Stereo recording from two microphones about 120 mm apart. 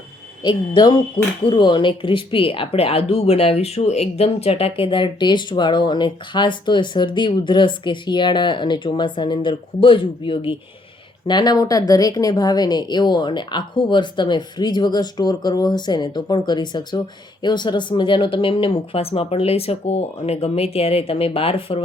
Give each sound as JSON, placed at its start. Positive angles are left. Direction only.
{"t": 0.4, "sound": "speech", "side_deg": 35}
{"t": 11.3, "sound": "speech", "side_deg": 35}